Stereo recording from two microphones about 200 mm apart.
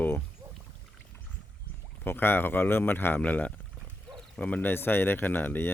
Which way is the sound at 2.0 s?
10° left (ahead or behind).